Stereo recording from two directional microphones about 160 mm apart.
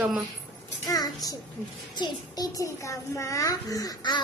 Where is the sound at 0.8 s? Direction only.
20° left (ahead or behind).